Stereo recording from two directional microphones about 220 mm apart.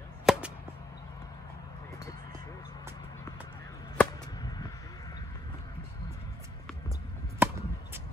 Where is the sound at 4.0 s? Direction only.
15° left (ahead or behind).